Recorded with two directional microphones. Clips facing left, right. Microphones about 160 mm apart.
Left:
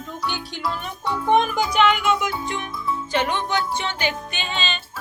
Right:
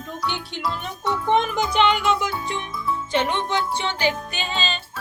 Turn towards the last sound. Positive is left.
turn(degrees=-35)  # may be behind; listen again after turning